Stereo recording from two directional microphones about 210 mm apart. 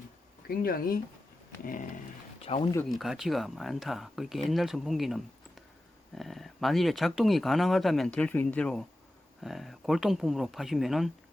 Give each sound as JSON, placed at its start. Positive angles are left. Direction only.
{"t": 0.4, "sound": "speech", "side_deg": 45}
{"t": 2.5, "sound": "speech", "side_deg": 30}
{"t": 2.9, "sound": "speech", "side_deg": 0}